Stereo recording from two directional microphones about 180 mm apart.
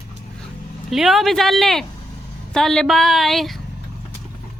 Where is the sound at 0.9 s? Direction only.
Centre (ahead or behind).